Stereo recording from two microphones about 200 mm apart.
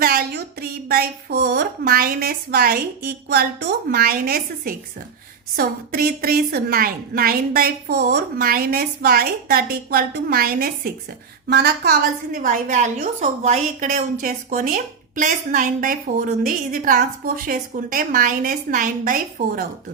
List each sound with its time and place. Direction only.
0.0 s a woman's voice: 50° right (ahead or behind)